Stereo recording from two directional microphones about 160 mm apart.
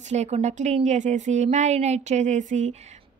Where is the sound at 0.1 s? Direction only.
45° right (ahead or behind).